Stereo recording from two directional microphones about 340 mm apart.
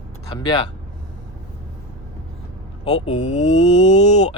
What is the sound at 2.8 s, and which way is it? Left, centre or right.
Speech, centre.